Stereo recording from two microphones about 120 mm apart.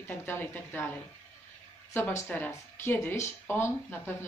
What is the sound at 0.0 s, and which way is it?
Speech, 20° left (ahead or behind).